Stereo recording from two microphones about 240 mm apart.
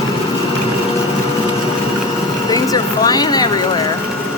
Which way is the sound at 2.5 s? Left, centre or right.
Centre.